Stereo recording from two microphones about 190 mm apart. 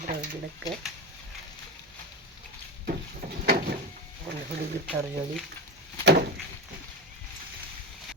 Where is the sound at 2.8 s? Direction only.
45° right (ahead or behind).